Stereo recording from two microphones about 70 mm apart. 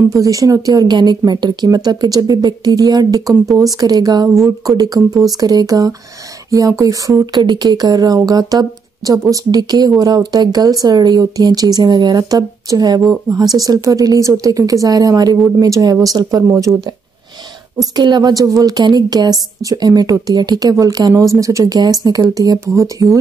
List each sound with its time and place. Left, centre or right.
0.1 s speech: right
7.3 s speech: right
17.7 s speech: right
18.8 s speech: right
21.2 s speech: right